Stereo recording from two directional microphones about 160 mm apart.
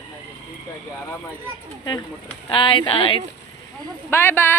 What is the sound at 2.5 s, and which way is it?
Speech, 35° left (ahead or behind).